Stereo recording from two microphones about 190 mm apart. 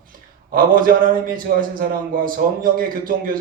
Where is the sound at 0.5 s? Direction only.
50° right (ahead or behind).